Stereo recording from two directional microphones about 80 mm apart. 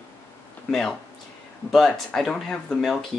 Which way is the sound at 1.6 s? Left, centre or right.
Centre.